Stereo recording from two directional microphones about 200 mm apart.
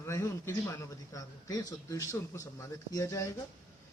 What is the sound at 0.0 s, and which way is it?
A man's voice, 15° left (ahead or behind).